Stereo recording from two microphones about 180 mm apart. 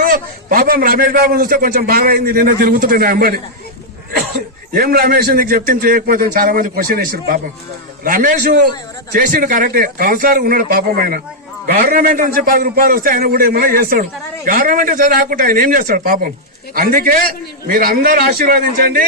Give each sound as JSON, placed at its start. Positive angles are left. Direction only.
{"t": 0.0, "sound": "a man's voice", "side_deg": -50}
{"t": 4.7, "sound": "a man's voice", "side_deg": -55}